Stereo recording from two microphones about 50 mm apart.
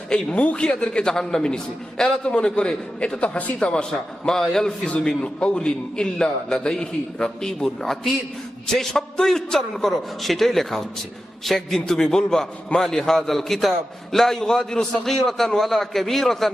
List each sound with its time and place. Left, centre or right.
0.1 s a man's voice: left
4.9 s a man's voice: left